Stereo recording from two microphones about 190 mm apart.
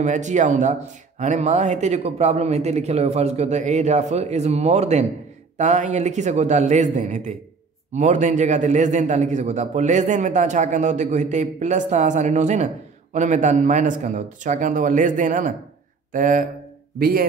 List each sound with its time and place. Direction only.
0.0 s a man's voice: 40° right (ahead or behind)